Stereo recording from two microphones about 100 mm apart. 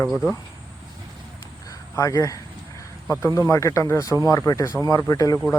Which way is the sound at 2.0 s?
35° left (ahead or behind).